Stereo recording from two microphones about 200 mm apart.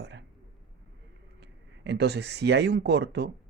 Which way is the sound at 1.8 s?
60° right (ahead or behind).